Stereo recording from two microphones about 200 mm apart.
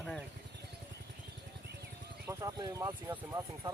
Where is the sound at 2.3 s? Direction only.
15° right (ahead or behind).